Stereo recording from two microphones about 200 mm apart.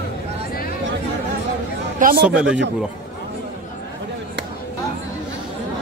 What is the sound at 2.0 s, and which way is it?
Speech, 45° right (ahead or behind).